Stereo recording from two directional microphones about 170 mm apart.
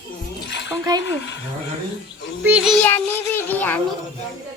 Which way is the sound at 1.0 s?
90° left.